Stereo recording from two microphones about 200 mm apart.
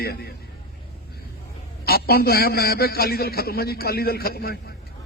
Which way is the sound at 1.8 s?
50° left (ahead or behind).